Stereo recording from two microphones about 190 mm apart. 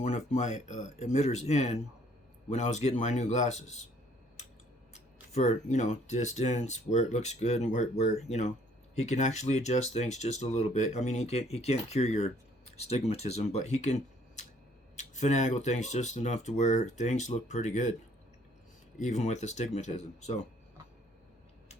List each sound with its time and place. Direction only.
0.3 s speech: 40° left (ahead or behind)
5.3 s speech: 40° left (ahead or behind)
18.9 s speech: 40° left (ahead or behind)